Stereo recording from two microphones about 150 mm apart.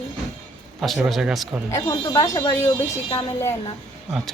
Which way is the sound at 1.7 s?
25° left (ahead or behind).